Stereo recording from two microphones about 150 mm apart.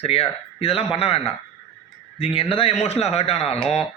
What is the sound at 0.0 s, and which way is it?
A man's voice, 40° left (ahead or behind).